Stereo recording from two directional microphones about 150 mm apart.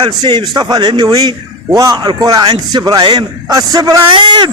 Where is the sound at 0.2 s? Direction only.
30° right (ahead or behind).